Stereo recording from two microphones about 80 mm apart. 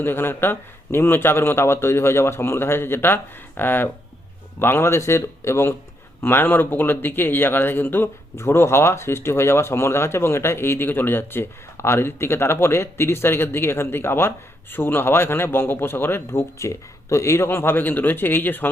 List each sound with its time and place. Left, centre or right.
0.0 s speech: left